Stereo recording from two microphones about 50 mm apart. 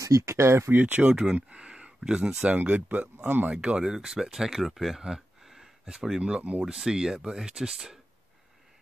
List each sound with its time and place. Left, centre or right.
0.0 s speech: right
0.7 s speech: right
1.0 s speech: centre
2.4 s speech: right
3.5 s speech: centre
6.2 s speech: right
6.6 s speech: centre